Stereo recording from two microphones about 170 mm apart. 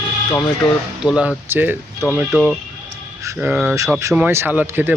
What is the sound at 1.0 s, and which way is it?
Speech, 5° right (ahead or behind).